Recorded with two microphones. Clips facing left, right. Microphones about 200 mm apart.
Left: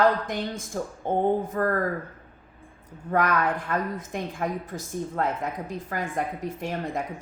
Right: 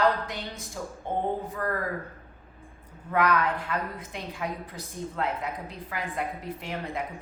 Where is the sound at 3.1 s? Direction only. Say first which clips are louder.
Left 1 dB; 50° left (ahead or behind).